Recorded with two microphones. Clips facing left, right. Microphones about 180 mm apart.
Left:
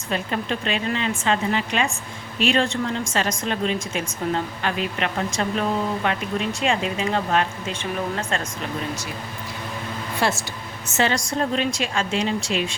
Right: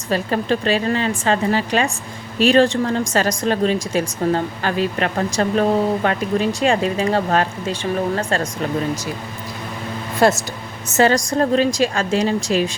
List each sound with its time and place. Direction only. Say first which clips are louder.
0.1 s a woman's voice: right 6 dB; 35° right (ahead or behind)
10.2 s a woman's voice: right 8 dB; 45° right (ahead or behind)